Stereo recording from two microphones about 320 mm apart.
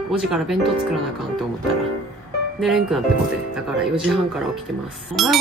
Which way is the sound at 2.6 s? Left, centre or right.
Centre.